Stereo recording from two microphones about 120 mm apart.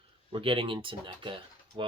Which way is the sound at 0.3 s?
45° right (ahead or behind).